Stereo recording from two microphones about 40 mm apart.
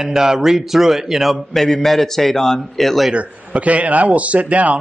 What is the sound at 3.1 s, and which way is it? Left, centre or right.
A man's voice, right.